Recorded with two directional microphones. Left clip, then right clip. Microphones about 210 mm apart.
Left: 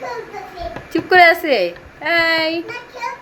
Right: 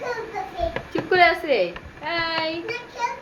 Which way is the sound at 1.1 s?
50° left (ahead or behind).